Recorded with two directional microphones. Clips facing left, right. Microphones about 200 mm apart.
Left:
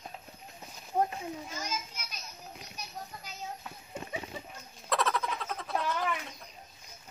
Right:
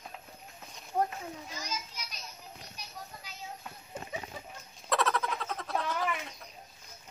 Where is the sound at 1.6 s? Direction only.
50° left (ahead or behind).